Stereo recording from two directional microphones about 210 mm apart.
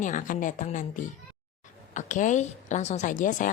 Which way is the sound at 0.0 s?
35° left (ahead or behind).